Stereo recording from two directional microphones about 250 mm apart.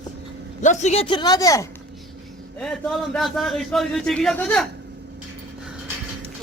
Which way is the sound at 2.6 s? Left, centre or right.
Centre.